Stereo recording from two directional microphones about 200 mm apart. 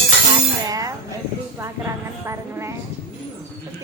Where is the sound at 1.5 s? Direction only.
15° right (ahead or behind).